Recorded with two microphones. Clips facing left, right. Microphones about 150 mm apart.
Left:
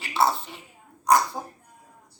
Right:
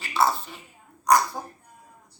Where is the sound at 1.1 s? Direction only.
25° left (ahead or behind).